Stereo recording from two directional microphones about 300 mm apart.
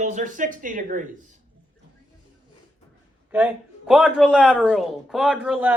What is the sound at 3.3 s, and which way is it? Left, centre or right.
A man's voice, centre.